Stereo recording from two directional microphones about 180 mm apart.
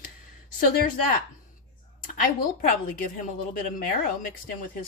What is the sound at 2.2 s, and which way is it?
Speech, 50° left (ahead or behind).